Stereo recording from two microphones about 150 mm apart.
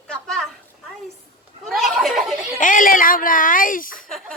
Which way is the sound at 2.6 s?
60° left (ahead or behind).